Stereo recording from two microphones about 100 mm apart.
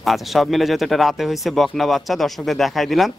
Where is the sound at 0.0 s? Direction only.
Centre (ahead or behind).